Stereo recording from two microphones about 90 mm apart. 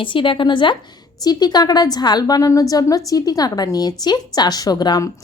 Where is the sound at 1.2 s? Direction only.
50° left (ahead or behind).